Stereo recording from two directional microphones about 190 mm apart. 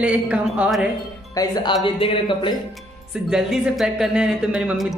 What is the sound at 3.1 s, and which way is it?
Speech, 5° right (ahead or behind).